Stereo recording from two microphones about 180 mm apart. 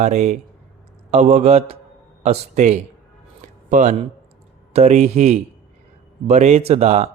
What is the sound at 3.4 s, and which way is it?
Music, 45° right (ahead or behind).